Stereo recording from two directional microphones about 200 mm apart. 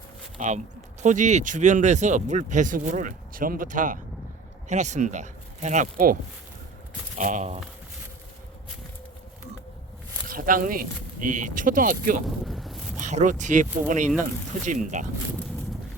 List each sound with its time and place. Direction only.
0.3 s speech: 35° right (ahead or behind)
7.2 s speech: 40° right (ahead or behind)
10.2 s speech: 45° right (ahead or behind)
12.5 s boat: centre (ahead or behind)
13.0 s speech: 35° right (ahead or behind)